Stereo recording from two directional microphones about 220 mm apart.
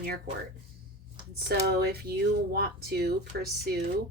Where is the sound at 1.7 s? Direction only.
45° right (ahead or behind).